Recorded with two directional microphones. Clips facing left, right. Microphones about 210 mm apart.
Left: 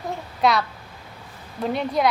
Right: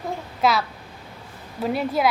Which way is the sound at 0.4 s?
Centre (ahead or behind).